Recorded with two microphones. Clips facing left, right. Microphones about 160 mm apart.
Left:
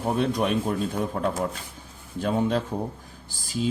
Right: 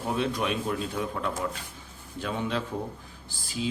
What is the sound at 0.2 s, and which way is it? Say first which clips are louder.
Speech: left 4 dB; 45° left (ahead or behind).